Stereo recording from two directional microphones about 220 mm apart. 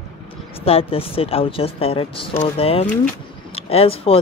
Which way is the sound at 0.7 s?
25° left (ahead or behind).